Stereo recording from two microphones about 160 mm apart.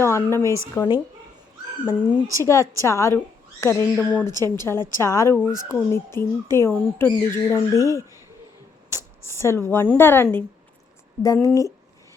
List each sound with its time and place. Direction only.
0.0 s speech: 15° left (ahead or behind)
3.9 s a woman's voice: centre (ahead or behind)
4.4 s a woman's voice: 25° right (ahead or behind)
5.0 s speech: 20° left (ahead or behind)
11.4 s a woman's voice: 20° left (ahead or behind)